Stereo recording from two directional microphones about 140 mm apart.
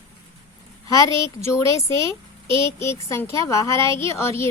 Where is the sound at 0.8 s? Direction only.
20° left (ahead or behind).